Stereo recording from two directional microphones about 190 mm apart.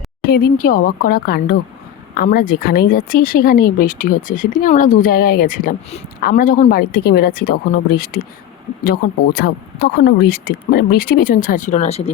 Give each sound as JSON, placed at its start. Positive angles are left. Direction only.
{"t": 0.2, "sound": "speech", "side_deg": 50}